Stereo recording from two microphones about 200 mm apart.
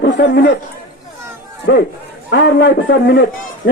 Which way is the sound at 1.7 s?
60° left (ahead or behind).